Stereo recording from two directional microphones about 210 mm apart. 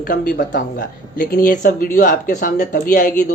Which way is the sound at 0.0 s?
40° left (ahead or behind).